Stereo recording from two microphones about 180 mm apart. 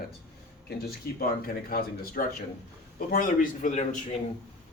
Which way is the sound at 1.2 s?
55° left (ahead or behind).